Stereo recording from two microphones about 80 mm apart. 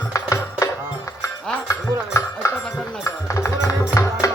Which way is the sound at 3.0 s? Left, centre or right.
Left.